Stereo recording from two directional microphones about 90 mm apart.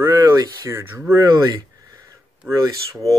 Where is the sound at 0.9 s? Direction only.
25° right (ahead or behind).